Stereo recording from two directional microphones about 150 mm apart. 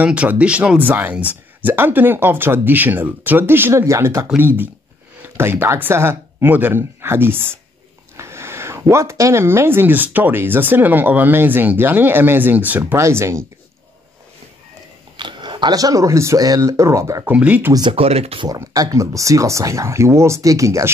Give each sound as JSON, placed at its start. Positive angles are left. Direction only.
{"t": 0.0, "sound": "speech", "side_deg": -10}
{"t": 15.1, "sound": "speech", "side_deg": -30}
{"t": 17.7, "sound": "speech", "side_deg": -35}
{"t": 18.5, "sound": "speech", "side_deg": -25}